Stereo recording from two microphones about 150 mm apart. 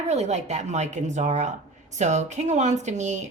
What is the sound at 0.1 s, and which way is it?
Speech, 50° right (ahead or behind).